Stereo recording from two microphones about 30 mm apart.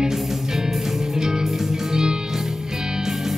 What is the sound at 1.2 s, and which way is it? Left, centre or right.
Music, right.